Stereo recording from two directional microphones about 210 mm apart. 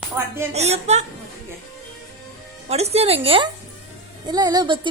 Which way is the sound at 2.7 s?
30° right (ahead or behind).